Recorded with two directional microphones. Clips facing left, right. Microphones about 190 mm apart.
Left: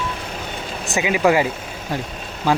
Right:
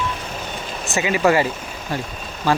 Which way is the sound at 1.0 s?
10° left (ahead or behind).